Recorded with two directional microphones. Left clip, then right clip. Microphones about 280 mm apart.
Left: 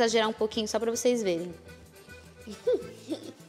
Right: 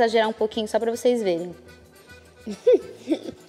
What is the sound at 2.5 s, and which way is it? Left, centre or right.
Music, right.